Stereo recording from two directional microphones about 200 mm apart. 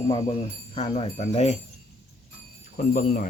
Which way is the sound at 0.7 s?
30° left (ahead or behind).